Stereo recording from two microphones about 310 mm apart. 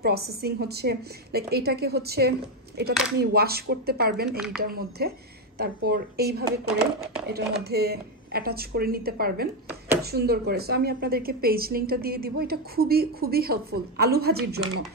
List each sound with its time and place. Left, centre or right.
0.0 s a woman's voice: right
4.3 s a woman's voice: centre
4.6 s a woman's voice: right